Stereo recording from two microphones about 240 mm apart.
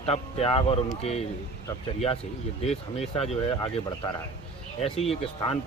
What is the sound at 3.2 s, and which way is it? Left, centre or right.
Speech, left.